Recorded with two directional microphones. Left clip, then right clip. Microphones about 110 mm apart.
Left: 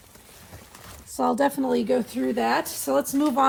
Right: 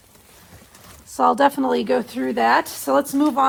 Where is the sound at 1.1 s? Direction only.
65° right (ahead or behind); by 3.1 s 45° right (ahead or behind).